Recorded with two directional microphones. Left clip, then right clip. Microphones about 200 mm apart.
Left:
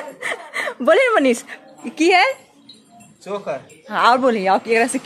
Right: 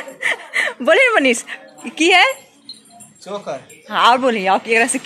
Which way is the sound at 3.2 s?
5° left (ahead or behind).